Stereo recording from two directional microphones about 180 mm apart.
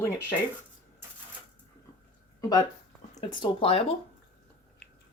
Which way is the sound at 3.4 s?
30° left (ahead or behind).